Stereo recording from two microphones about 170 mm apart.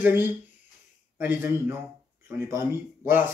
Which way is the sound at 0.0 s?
10° right (ahead or behind).